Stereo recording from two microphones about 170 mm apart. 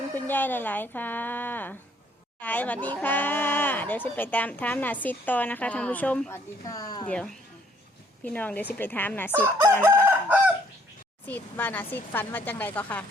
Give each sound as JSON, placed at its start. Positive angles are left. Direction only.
{"t": 0.3, "sound": "speech", "side_deg": 10}
{"t": 6.7, "sound": "speech", "side_deg": 20}
{"t": 8.2, "sound": "speech", "side_deg": 10}
{"t": 9.4, "sound": "chicken", "side_deg": -15}
{"t": 11.3, "sound": "speech", "side_deg": 10}